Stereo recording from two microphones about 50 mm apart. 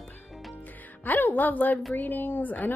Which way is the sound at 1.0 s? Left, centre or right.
Left.